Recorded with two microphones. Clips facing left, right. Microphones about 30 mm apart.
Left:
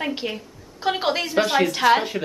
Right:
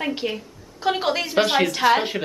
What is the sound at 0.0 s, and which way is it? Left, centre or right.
A woman's voice, centre.